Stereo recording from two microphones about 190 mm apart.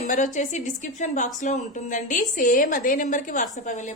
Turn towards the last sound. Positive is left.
turn(degrees=40)  # may be behind; listen again after turning